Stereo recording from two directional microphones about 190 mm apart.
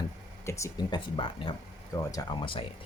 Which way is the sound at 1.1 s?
25° left (ahead or behind).